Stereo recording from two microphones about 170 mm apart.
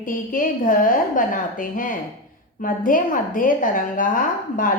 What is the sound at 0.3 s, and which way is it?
A woman's voice, 50° left (ahead or behind).